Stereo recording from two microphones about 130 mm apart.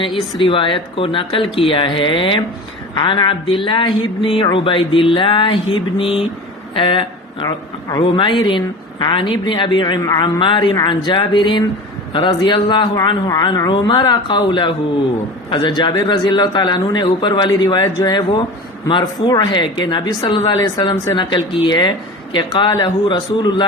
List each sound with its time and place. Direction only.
0.0 s a man's voice: 40° left (ahead or behind)
7.4 s a man's voice: 30° left (ahead or behind)
10.0 s a man's voice: 25° left (ahead or behind)
20.9 s speech: 20° left (ahead or behind)
21.2 s a man's voice: 40° left (ahead or behind)